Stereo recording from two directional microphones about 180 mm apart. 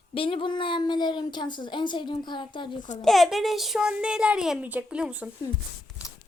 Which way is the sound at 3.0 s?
Centre (ahead or behind).